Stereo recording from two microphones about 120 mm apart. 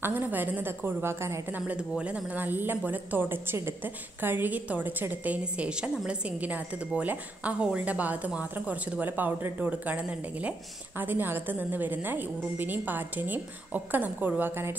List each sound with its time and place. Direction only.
0.0 s a woman's voice: 15° right (ahead or behind)